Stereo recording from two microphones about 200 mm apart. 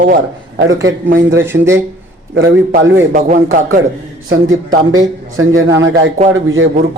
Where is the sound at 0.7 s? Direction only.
80° right.